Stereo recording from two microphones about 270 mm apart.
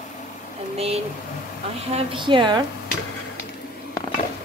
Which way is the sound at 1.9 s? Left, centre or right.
Centre.